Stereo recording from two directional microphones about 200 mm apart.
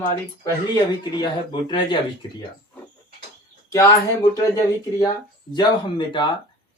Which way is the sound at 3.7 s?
15° left (ahead or behind).